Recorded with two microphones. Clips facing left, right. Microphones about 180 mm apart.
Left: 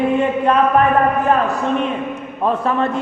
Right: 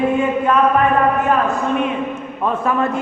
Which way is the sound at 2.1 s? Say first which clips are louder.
Left 2 dB; 35° left (ahead or behind).